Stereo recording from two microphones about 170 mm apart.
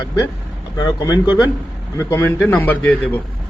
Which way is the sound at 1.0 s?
20° left (ahead or behind).